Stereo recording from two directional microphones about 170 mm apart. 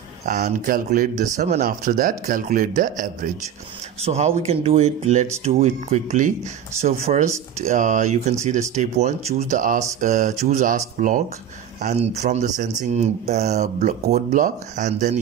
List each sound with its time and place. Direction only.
0.4 s speech: 55° right (ahead or behind)
4.0 s speech: 40° right (ahead or behind)
11.8 s speech: 40° right (ahead or behind)